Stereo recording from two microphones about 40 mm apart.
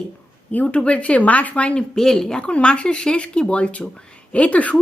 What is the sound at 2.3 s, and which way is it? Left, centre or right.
Speech, left.